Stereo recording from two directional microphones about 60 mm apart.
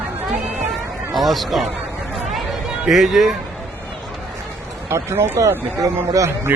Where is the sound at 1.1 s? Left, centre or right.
Centre.